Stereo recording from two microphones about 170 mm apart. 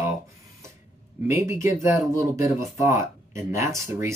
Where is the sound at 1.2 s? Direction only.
15° right (ahead or behind).